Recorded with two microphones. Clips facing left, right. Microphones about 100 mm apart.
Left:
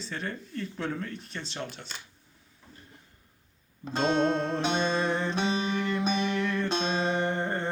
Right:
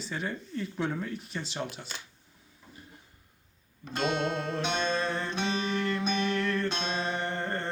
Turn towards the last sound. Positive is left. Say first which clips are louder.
# left 4 dB
turn(degrees=15)  # may be behind; listen again after turning